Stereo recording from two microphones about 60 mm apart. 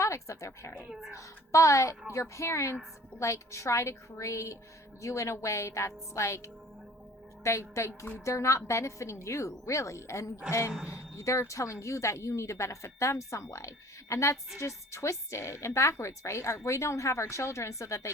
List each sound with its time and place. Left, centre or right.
0.0 s a woman's voice: left
0.9 s speech: centre
1.1 s a woman's voice: left